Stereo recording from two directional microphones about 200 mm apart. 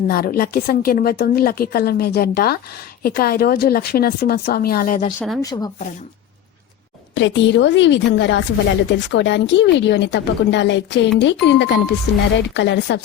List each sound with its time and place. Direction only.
0.1 s speech: 50° left (ahead or behind)
5.4 s speech: 20° left (ahead or behind)
7.1 s speech: 65° left (ahead or behind)